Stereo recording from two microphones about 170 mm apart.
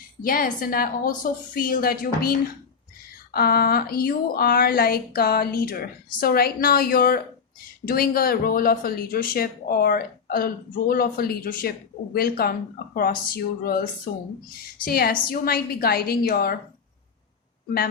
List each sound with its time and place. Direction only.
0.2 s speech: 60° left (ahead or behind)
3.3 s speech: 65° left (ahead or behind)